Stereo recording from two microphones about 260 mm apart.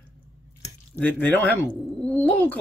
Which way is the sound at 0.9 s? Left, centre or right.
Centre.